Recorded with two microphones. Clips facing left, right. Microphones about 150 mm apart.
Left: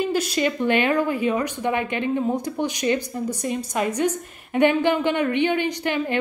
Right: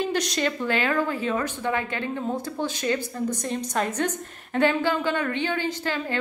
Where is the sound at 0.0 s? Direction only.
5° left (ahead or behind).